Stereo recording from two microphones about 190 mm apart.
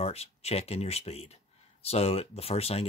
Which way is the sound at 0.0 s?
35° left (ahead or behind).